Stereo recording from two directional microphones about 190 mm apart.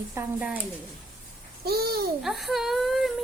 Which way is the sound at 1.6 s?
55° right (ahead or behind).